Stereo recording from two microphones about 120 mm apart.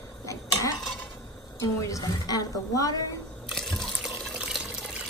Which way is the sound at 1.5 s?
30° left (ahead or behind).